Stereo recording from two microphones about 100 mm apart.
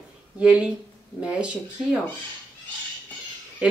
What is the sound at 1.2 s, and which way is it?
Speech, 10° right (ahead or behind).